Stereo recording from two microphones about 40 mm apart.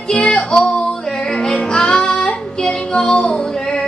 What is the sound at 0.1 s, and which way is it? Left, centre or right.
Music, left.